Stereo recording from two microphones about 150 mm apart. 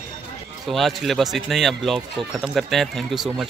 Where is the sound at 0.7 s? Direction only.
Centre (ahead or behind).